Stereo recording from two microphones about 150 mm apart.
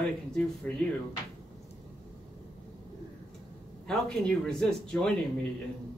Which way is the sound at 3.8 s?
5° left (ahead or behind).